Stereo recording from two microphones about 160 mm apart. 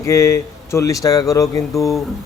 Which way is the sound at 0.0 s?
20° left (ahead or behind).